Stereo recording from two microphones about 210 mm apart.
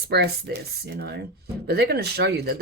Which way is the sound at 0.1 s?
50° right (ahead or behind).